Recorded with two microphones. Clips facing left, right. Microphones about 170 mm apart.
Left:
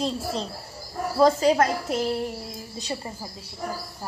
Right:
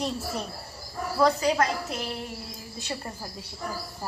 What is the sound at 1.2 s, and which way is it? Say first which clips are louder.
Speech: left 4 dB; 30° left (ahead or behind).